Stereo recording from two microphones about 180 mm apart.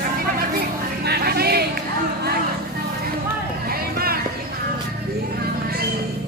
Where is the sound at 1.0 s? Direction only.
60° right (ahead or behind).